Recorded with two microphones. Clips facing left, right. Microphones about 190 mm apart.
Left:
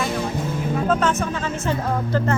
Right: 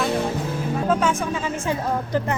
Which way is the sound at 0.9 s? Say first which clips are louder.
Even; 10° right (ahead or behind).